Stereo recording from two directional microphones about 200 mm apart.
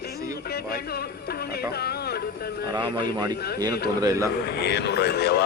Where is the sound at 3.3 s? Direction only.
50° left (ahead or behind).